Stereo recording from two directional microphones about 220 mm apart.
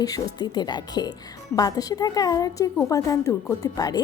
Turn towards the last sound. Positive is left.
turn(degrees=15)  # may be behind; listen again after turning